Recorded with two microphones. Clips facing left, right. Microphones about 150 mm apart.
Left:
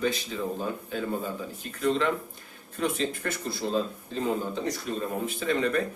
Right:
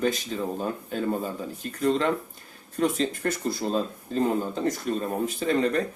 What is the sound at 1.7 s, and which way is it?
Speech, 40° right (ahead or behind).